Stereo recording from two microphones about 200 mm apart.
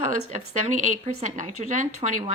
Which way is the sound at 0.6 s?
35° right (ahead or behind).